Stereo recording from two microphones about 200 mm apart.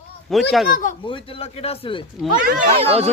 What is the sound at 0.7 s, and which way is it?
Speech, 40° left (ahead or behind).